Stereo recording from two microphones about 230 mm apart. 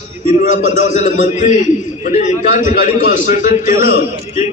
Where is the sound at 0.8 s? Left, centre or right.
Left.